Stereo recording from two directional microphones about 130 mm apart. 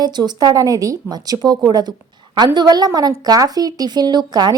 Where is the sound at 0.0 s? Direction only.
30° right (ahead or behind).